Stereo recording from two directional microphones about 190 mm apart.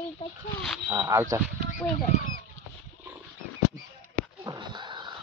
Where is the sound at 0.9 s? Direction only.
10° right (ahead or behind).